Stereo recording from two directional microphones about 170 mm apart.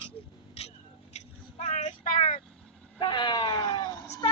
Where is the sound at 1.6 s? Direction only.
40° left (ahead or behind).